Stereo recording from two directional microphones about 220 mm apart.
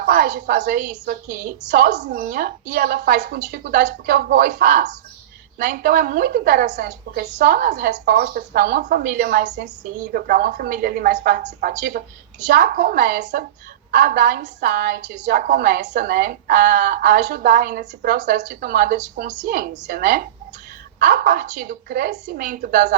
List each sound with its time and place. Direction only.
0.0 s a woman's voice: 40° right (ahead or behind)